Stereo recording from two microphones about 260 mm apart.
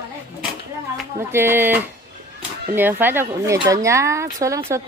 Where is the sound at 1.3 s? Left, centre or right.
Centre.